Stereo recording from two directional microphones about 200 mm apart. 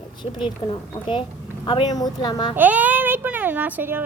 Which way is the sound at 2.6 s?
10° right (ahead or behind).